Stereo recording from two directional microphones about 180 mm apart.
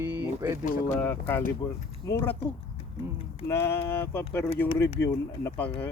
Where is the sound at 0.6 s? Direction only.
50° left (ahead or behind).